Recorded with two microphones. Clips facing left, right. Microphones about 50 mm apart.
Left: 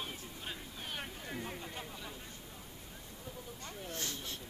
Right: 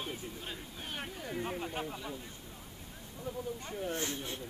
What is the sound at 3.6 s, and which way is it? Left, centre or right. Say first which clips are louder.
Speech: right 4 dB; right.